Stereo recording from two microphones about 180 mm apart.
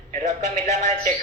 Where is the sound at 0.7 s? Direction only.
40° right (ahead or behind).